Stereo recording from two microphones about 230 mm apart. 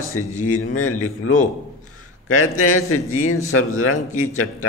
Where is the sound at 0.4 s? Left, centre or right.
Left.